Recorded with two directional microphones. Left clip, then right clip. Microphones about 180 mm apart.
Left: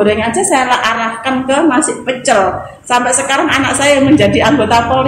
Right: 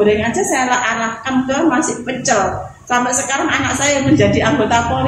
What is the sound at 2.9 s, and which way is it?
A woman's voice, 30° left (ahead or behind).